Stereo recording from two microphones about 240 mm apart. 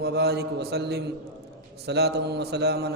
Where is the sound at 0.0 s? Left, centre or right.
Right.